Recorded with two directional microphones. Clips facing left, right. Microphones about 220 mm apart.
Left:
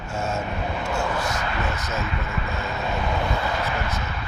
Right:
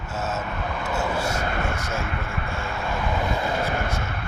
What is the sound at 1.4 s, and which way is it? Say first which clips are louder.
Speech: right 1 dB; 45° right (ahead or behind).